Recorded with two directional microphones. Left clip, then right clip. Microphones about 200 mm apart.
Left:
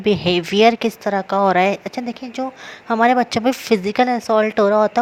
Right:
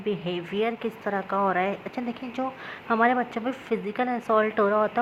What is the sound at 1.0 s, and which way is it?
Speech, 40° left (ahead or behind).